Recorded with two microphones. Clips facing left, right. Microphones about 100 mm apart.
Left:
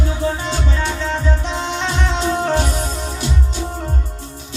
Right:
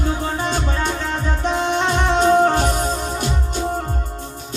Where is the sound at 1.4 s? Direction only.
50° right (ahead or behind).